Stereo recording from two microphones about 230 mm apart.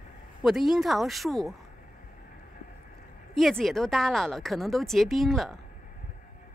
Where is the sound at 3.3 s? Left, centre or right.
Centre.